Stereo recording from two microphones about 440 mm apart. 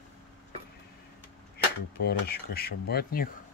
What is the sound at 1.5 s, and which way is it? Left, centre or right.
Speech, left.